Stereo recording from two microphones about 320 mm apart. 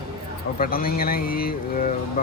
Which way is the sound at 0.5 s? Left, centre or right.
Left.